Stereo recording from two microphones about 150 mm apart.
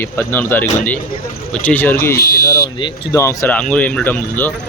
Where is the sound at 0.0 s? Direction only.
15° left (ahead or behind).